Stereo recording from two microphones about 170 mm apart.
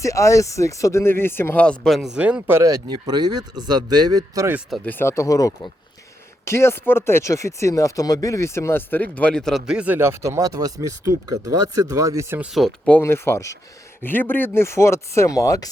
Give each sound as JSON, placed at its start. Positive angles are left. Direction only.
{"t": 0.0, "sound": "speech", "side_deg": 20}
{"t": 4.9, "sound": "speech", "side_deg": 15}
{"t": 12.5, "sound": "speech", "side_deg": 5}
{"t": 13.0, "sound": "speech", "side_deg": 15}